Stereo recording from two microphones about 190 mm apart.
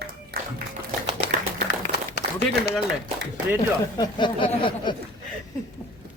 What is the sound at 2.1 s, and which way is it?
Run, 60° left (ahead or behind).